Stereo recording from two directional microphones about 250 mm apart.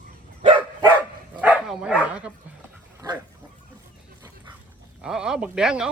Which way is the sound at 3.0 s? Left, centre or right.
Centre.